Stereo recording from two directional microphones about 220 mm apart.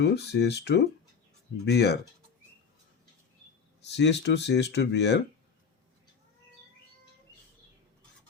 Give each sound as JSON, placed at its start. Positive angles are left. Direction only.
{"t": 0.0, "sound": "speech", "side_deg": 50}
{"t": 3.8, "sound": "speech", "side_deg": 50}